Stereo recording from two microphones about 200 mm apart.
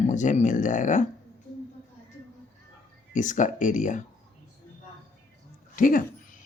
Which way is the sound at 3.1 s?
40° left (ahead or behind).